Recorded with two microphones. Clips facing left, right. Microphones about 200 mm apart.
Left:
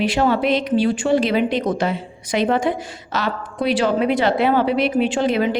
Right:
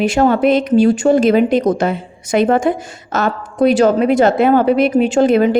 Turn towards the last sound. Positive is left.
turn(degrees=-45)  # may be behind; listen again after turning